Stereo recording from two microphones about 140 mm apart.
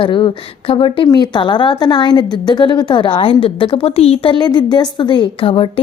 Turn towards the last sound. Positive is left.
turn(degrees=40)  # may be behind; listen again after turning